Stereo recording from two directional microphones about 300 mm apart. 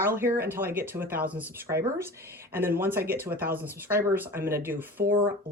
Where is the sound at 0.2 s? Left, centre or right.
Centre.